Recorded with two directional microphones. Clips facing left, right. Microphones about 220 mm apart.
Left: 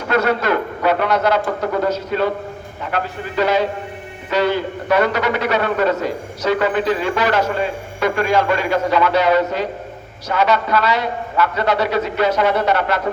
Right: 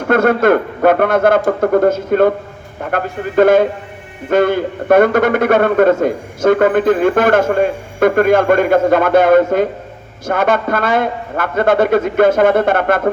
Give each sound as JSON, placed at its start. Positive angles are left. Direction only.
{"t": 0.1, "sound": "a man's voice", "side_deg": -50}